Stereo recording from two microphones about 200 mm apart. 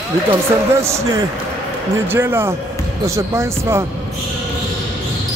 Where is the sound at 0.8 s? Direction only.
15° right (ahead or behind).